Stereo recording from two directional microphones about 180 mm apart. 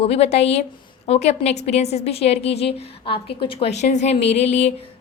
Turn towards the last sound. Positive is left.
turn(degrees=35)  # may be behind; listen again after turning